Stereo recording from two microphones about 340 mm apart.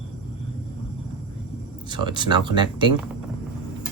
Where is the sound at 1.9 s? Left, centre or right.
Centre.